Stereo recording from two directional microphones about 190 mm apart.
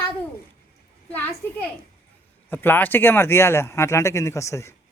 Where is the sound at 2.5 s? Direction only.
10° left (ahead or behind).